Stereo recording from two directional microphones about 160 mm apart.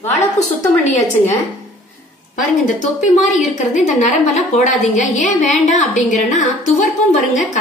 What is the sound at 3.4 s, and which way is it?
A woman's voice, 50° left (ahead or behind).